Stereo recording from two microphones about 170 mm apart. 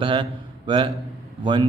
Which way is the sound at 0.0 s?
30° right (ahead or behind).